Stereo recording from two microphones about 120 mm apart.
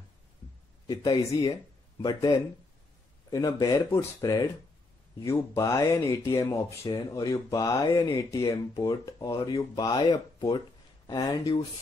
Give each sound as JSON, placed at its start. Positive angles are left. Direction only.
{"t": 0.8, "sound": "speech", "side_deg": 35}